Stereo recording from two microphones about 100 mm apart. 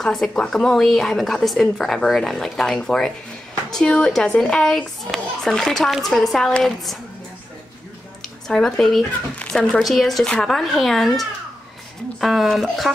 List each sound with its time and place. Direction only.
0.0 s a child's voice: 5° left (ahead or behind)
8.2 s a child's voice: 5° left (ahead or behind)